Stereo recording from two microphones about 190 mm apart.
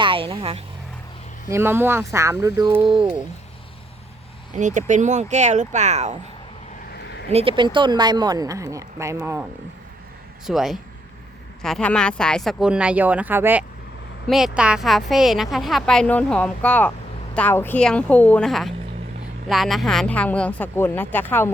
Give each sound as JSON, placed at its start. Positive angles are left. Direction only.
{"t": 0.0, "sound": "vehicle", "side_deg": -30}
{"t": 1.5, "sound": "speech", "side_deg": -15}
{"t": 4.5, "sound": "speech", "side_deg": -40}
{"t": 6.9, "sound": "a sound", "side_deg": 60}
{"t": 7.3, "sound": "speech", "side_deg": -30}
{"t": 10.4, "sound": "a woman's voice", "side_deg": 0}